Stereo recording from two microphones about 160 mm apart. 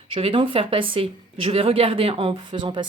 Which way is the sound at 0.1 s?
35° right (ahead or behind).